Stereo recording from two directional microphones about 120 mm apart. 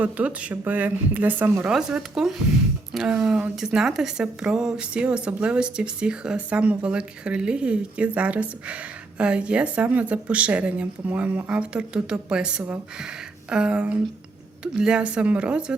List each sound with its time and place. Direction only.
0.0 s speech: 10° right (ahead or behind)